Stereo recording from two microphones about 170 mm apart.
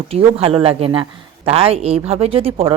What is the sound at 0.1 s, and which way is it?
A woman's voice, 35° right (ahead or behind).